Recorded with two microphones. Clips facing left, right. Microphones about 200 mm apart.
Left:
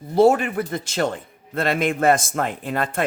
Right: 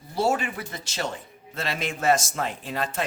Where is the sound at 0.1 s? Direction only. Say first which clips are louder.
Left 9 dB; 55° left (ahead or behind).